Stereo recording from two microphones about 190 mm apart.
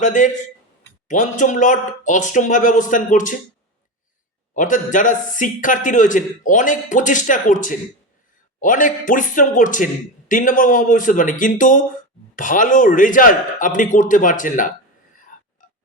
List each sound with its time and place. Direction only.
0.0 s speech: 40° left (ahead or behind)
4.5 s a man's voice: 40° left (ahead or behind)
15.3 s a sound: 45° left (ahead or behind)